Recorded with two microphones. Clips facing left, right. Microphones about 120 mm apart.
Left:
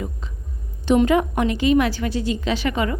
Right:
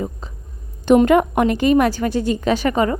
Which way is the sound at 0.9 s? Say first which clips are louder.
Right 4 dB; 50° right (ahead or behind).